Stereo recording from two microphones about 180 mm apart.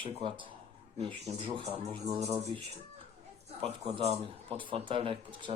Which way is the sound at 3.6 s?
35° right (ahead or behind).